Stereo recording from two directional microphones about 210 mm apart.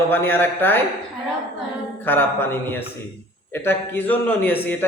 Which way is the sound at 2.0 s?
10° left (ahead or behind).